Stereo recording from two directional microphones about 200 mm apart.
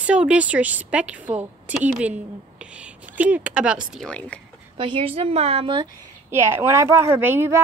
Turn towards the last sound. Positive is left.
turn(degrees=-10)  # may be behind; listen again after turning